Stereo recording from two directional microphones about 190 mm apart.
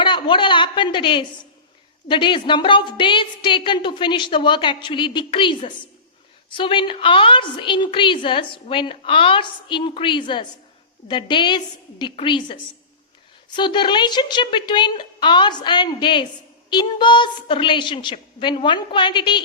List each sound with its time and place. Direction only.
0.0 s a woman's voice: 25° left (ahead or behind)
13.6 s a woman's voice: 25° left (ahead or behind)